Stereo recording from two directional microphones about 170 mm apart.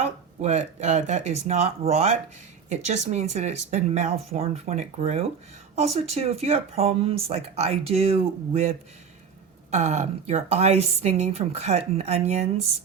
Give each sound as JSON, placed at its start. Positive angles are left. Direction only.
{"t": 0.0, "sound": "speech", "side_deg": -40}
{"t": 9.7, "sound": "speech", "side_deg": -40}